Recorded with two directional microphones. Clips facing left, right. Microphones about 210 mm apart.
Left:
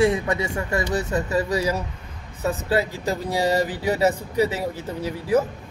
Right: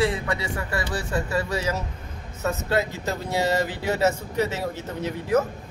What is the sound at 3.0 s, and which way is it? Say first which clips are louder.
Speech: left 2 dB; 15° left (ahead or behind).